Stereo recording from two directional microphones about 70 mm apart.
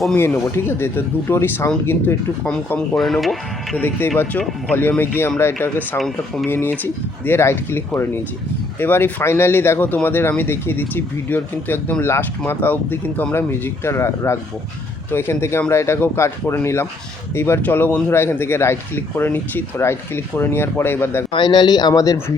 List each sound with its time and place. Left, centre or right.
0.4 s a man's voice: left
3.0 s speech: centre
3.8 s a man's voice: left
6.0 s speech: centre
6.5 s a man's voice: left
21.4 s speech: left